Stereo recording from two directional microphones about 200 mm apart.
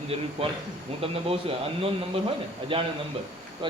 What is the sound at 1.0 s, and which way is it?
Speech, 30° right (ahead or behind).